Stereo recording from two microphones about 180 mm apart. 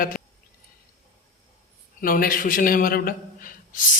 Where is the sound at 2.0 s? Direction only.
50° left (ahead or behind).